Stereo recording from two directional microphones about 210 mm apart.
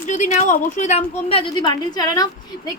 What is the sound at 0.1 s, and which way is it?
A woman's voice, 35° left (ahead or behind).